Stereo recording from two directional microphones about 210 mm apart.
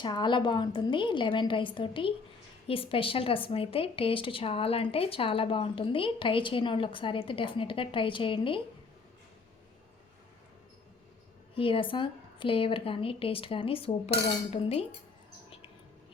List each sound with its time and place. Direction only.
0.0 s speech: 20° left (ahead or behind)
11.5 s speech: 25° left (ahead or behind)
15.4 s mouse: 25° left (ahead or behind)